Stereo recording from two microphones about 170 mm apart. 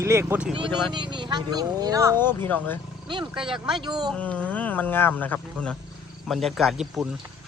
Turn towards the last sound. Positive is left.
turn(degrees=0)  # may be behind; listen again after turning